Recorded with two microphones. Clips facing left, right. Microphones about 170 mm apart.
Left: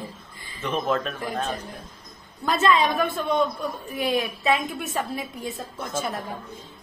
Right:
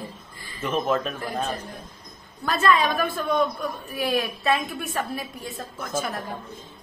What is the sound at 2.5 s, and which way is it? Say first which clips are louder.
A woman's voice: left 1 dB; 20° left (ahead or behind).